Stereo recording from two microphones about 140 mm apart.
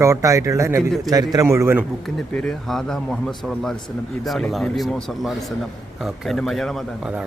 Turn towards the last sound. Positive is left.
turn(degrees=0)  # may be behind; listen again after turning